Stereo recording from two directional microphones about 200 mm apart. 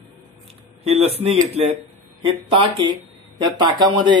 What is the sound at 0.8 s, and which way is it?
A man's voice, 30° right (ahead or behind).